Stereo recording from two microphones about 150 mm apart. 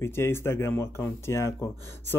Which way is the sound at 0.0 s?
15° left (ahead or behind).